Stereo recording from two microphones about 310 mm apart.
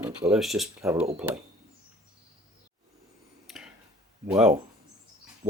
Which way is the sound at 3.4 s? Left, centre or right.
Centre.